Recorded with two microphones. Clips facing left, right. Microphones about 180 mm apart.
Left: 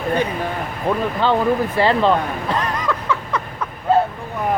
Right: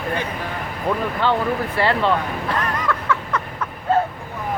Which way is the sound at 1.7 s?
20° left (ahead or behind).